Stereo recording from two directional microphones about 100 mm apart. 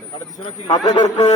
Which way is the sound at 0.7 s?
45° left (ahead or behind).